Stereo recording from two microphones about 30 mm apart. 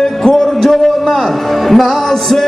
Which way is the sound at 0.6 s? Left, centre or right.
Centre.